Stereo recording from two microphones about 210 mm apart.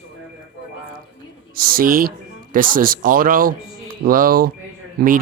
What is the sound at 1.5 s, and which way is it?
Speech, 45° right (ahead or behind).